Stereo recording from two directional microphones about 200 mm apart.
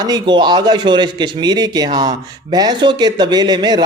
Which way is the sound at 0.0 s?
20° right (ahead or behind).